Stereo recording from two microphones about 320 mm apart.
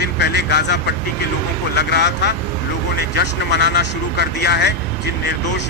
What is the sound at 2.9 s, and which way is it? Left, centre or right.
Speech, left.